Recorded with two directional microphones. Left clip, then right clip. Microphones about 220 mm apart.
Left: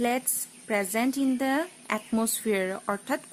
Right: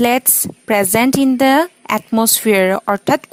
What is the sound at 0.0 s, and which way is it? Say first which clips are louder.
A woman's voice: right 13 dB; 45° right (ahead or behind).